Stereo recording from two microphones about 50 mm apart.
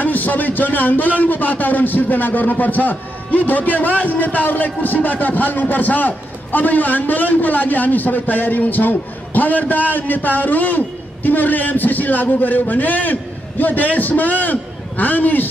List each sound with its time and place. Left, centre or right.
0.0 s a man's voice: left